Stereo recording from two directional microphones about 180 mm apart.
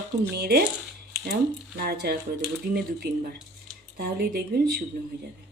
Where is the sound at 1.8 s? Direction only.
60° right (ahead or behind).